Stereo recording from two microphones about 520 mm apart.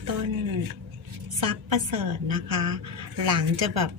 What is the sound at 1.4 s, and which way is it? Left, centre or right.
A woman's voice, right.